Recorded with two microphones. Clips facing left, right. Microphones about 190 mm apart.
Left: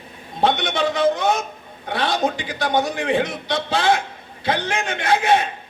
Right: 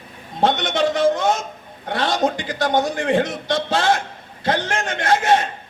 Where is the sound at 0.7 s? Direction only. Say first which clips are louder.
Right 2 dB; 50° right (ahead or behind).